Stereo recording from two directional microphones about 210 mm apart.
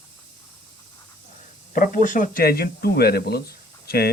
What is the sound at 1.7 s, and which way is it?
Speech, 40° left (ahead or behind).